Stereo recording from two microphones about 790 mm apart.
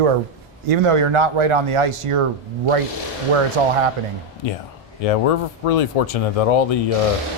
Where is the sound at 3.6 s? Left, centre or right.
Right.